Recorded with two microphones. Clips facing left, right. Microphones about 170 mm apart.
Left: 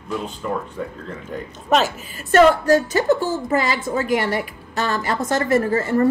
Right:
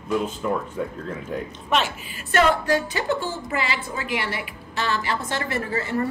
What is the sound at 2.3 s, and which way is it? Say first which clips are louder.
A woman's voice: left 6 dB; 45° left (ahead or behind).